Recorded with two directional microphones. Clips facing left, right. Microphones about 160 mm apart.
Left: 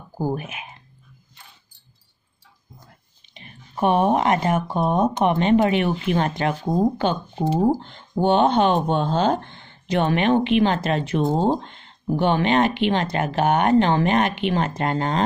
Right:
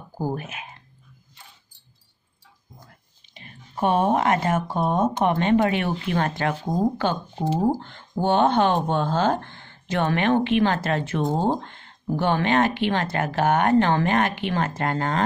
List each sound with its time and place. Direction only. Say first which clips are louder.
0.2 s speech: left 3 dB; 15° left (ahead or behind)
3.3 s speech: left 2 dB; 20° left (ahead or behind)
8.2 s speech: left 2 dB; 20° left (ahead or behind)